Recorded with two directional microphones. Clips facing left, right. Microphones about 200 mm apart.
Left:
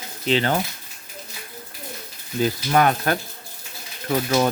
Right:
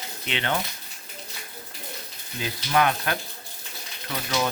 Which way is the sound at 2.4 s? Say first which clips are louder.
Left 4 dB; 45° left (ahead or behind).